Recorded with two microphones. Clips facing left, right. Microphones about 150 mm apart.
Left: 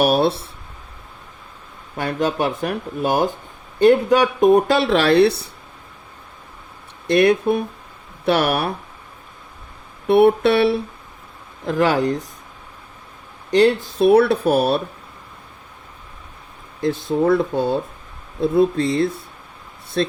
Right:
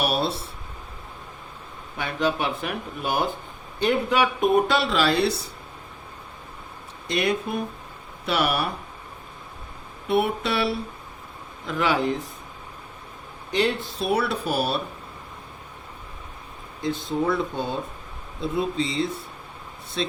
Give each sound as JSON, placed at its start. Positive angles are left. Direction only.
{"t": 0.1, "sound": "speech", "side_deg": 60}
{"t": 2.0, "sound": "speech", "side_deg": 45}
{"t": 4.8, "sound": "speech", "side_deg": 60}
{"t": 7.1, "sound": "speech", "side_deg": 60}
{"t": 10.1, "sound": "speech", "side_deg": 60}
{"t": 11.6, "sound": "speech", "side_deg": 45}
{"t": 13.5, "sound": "speech", "side_deg": 45}
{"t": 17.1, "sound": "speech", "side_deg": 50}